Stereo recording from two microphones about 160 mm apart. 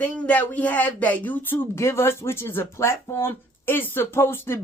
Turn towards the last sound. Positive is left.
turn(degrees=15)  # may be behind; listen again after turning